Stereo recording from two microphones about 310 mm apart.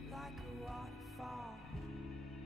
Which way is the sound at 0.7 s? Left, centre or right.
Centre.